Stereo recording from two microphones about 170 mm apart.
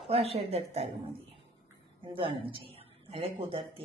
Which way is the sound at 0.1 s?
35° right (ahead or behind).